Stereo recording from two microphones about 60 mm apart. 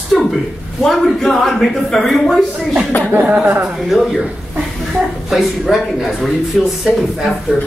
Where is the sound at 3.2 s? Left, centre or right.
Centre.